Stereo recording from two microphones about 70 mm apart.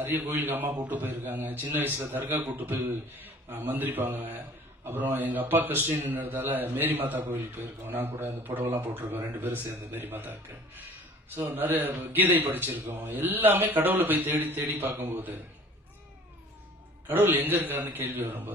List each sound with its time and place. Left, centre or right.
0.2 s a man's voice: right
11.5 s a man's voice: right
17.1 s a man's voice: right